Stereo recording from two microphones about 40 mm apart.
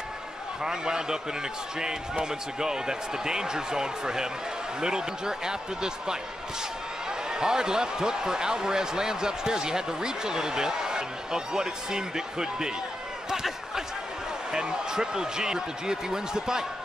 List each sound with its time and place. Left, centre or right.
0.7 s speech: centre
7.3 s speech: centre
13.3 s basketball bounce: centre
14.5 s speech: centre